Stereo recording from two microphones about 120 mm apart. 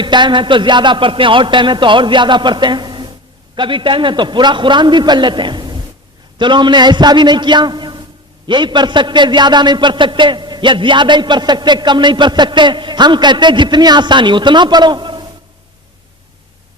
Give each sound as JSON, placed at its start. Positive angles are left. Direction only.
{"t": 0.0, "sound": "a man's voice", "side_deg": -40}